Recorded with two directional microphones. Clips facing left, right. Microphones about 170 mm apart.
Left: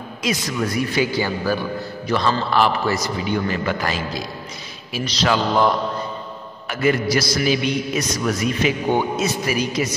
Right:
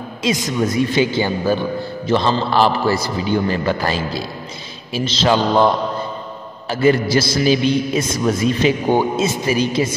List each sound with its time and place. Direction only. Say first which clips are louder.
0.2 s a man's voice: right 4 dB; 20° right (ahead or behind)